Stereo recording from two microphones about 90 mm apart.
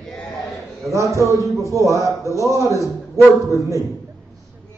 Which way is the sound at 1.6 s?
35° right (ahead or behind).